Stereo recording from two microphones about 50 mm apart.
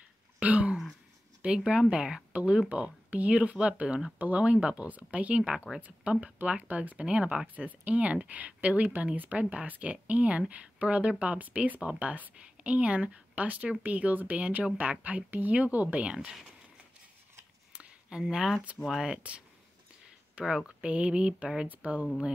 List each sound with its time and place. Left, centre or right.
0.4 s throat clearing: right
1.4 s speech: centre
17.7 s a sound: centre
18.9 s speech: centre; by 22.0 s right